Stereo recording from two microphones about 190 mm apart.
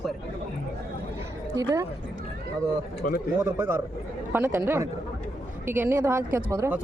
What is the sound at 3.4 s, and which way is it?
Speech, 10° right (ahead or behind).